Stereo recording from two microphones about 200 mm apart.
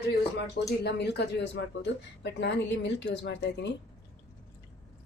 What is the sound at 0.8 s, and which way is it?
Speech, 55° left (ahead or behind).